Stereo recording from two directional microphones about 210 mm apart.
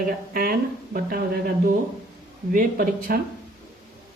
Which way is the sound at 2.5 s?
45° right (ahead or behind).